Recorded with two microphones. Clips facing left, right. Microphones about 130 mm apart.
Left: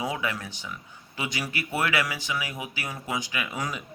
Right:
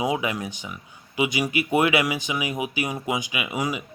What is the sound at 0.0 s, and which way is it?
Speech, 15° right (ahead or behind).